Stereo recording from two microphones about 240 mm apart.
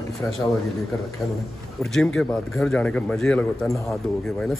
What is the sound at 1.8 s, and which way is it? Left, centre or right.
A man's voice, centre.